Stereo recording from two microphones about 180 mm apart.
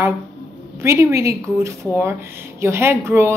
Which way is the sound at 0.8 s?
15° right (ahead or behind).